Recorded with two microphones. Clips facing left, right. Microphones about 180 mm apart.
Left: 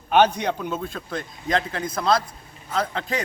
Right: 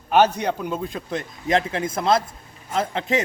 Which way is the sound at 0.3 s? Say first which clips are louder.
Right 1 dB; 10° right (ahead or behind).